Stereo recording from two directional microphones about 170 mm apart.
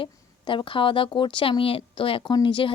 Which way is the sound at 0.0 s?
30° left (ahead or behind).